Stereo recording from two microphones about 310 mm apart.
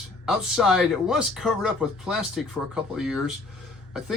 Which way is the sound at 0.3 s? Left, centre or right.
Centre.